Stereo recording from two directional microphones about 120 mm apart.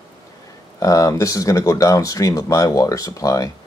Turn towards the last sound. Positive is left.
turn(degrees=30)  # may be behind; listen again after turning